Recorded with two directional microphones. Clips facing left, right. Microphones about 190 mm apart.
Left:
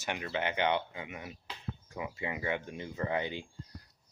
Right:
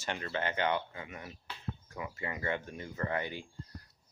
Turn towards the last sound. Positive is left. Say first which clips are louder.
# left 2 dB
turn(degrees=20)  # may be behind; listen again after turning